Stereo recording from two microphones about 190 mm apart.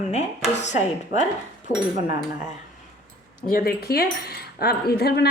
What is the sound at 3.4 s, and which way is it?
Speech, 50° left (ahead or behind).